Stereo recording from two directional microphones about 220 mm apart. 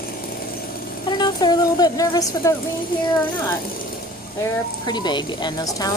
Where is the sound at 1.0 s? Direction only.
20° left (ahead or behind).